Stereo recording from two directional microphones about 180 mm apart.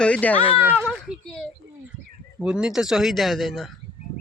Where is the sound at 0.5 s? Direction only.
10° right (ahead or behind).